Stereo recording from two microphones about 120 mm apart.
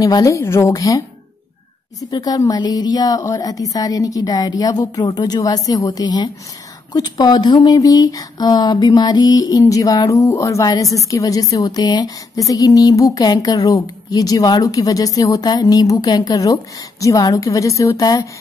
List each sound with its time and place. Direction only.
0.0 s a woman's voice: 30° left (ahead or behind)